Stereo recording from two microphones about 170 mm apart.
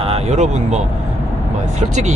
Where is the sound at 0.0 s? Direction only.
35° right (ahead or behind).